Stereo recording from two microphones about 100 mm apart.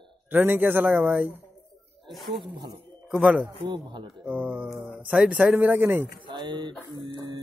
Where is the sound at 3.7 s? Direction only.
50° right (ahead or behind).